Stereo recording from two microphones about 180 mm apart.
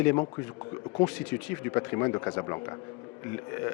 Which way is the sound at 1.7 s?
20° left (ahead or behind).